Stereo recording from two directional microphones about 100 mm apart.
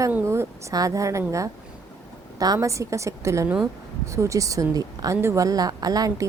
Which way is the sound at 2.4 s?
35° right (ahead or behind).